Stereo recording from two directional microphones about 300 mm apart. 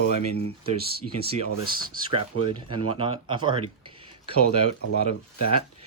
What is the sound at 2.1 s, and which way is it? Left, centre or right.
Speech, centre.